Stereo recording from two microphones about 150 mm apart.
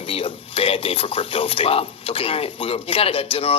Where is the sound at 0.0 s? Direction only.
40° left (ahead or behind).